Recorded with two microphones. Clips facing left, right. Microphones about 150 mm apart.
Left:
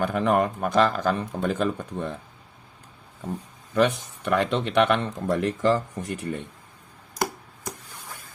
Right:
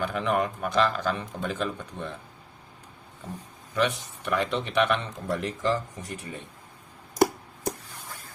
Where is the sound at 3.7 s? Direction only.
50° left (ahead or behind).